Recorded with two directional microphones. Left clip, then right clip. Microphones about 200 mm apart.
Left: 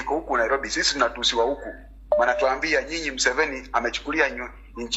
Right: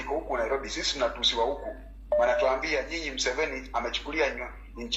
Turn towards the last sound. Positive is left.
turn(degrees=30)  # may be behind; listen again after turning